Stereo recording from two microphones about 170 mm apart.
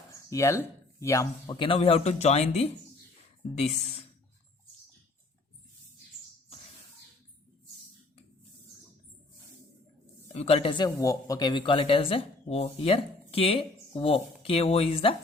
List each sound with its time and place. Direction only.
0.1 s speech: 20° left (ahead or behind)
1.5 s speech: 30° left (ahead or behind)
10.3 s speech: 35° left (ahead or behind)